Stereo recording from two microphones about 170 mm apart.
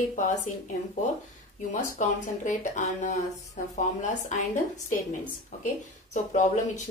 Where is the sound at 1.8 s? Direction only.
45° left (ahead or behind).